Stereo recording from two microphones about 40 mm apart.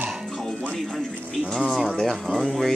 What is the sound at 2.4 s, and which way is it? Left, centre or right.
Speech, centre.